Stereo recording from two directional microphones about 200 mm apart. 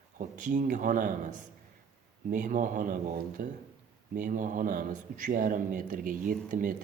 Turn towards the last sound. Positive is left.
turn(degrees=-40)  # may be behind; listen again after turning